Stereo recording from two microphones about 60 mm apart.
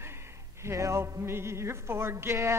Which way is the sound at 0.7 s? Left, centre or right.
Right.